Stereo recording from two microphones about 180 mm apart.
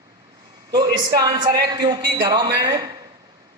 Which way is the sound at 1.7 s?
25° right (ahead or behind).